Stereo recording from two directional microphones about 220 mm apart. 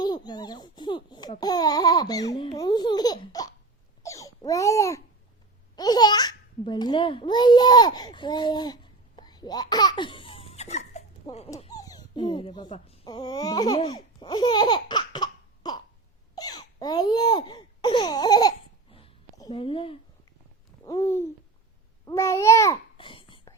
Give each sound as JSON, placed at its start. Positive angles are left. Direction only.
{"t": 0.0, "sound": "babbling", "side_deg": 20}
{"t": 11.7, "sound": "dog", "side_deg": 15}
{"t": 16.3, "sound": "babbling", "side_deg": 15}
{"t": 20.8, "sound": "a sound", "side_deg": 15}
{"t": 22.0, "sound": "babbling", "side_deg": 15}